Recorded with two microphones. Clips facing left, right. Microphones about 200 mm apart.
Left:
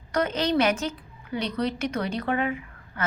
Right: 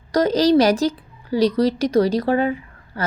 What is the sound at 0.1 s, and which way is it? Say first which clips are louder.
A woman's voice: right 9 dB; 35° right (ahead or behind).